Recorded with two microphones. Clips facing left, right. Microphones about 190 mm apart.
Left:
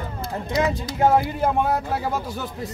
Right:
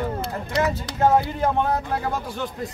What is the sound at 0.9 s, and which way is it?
Speech, 10° left (ahead or behind).